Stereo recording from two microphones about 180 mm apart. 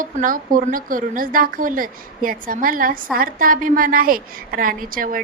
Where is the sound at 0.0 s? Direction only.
50° right (ahead or behind).